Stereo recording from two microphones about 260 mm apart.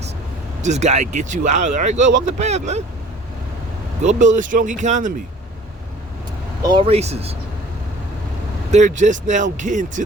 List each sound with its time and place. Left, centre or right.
0.6 s speech: right
4.0 s speech: right
6.7 s speech: right
8.7 s speech: right